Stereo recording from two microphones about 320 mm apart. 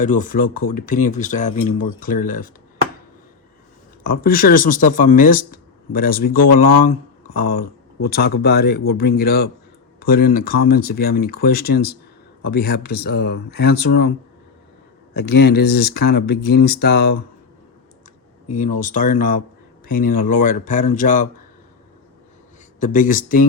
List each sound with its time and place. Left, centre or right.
0.0 s speech: left
4.0 s speech: left
15.1 s speech: left
18.4 s speech: left
22.8 s speech: left